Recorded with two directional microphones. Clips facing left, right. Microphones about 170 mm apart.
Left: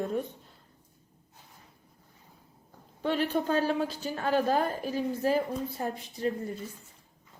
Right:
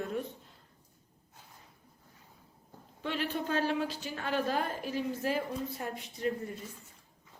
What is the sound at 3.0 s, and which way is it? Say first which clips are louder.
A woman's voice: left 6 dB; 40° left (ahead or behind).